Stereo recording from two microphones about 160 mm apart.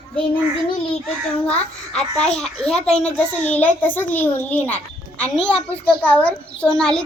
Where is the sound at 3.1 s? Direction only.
10° left (ahead or behind).